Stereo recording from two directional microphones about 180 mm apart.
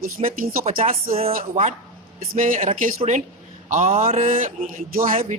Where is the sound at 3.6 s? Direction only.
45° right (ahead or behind).